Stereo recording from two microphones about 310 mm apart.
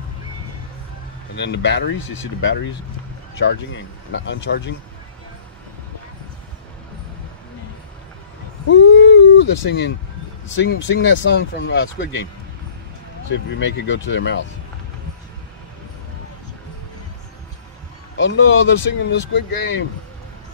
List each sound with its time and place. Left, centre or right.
1.3 s speech: left
8.6 s a sound: left
10.5 s speech: left
13.3 s speech: left
18.1 s speech: left